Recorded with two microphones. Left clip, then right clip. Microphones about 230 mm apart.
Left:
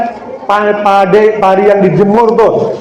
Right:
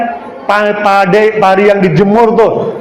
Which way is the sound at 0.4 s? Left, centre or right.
Right.